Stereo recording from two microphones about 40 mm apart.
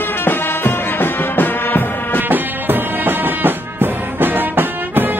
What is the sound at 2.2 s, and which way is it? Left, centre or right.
Music, right.